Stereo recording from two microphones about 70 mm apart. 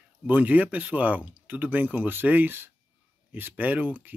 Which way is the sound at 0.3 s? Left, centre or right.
Right.